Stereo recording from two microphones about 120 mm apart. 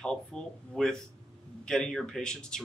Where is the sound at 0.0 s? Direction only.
5° left (ahead or behind).